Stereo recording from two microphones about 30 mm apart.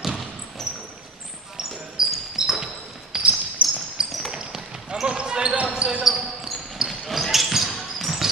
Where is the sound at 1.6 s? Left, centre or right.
Centre.